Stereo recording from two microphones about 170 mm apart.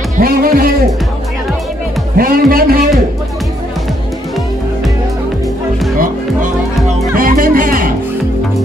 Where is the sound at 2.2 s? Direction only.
60° right (ahead or behind).